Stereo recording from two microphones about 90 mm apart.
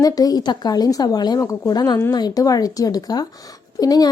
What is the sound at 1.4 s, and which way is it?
Speech, 35° left (ahead or behind).